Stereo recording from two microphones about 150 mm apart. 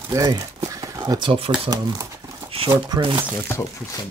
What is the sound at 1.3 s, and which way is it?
Speech, 40° right (ahead or behind).